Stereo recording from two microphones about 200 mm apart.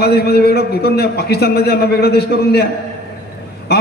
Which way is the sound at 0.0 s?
50° left (ahead or behind).